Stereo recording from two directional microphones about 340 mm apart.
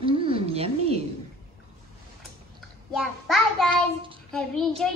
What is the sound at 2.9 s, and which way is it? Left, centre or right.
Speech, centre.